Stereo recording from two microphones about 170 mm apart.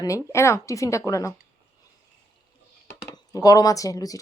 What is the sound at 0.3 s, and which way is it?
Speech, 15° left (ahead or behind).